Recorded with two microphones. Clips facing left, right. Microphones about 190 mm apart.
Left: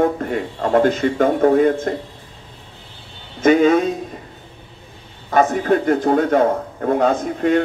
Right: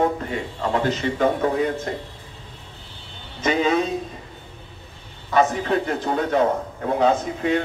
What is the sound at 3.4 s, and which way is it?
Speech, 50° left (ahead or behind).